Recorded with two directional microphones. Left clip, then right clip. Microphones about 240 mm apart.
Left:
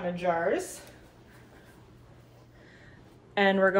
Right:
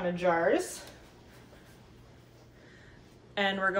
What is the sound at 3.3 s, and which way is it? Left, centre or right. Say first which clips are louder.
Speech: left 6 dB; left.